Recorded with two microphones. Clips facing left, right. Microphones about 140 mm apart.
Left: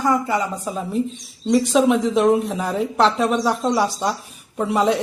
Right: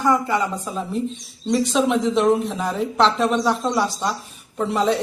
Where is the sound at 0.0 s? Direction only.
10° left (ahead or behind).